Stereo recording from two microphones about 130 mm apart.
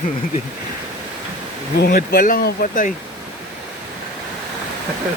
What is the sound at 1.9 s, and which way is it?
Speech, 90° left.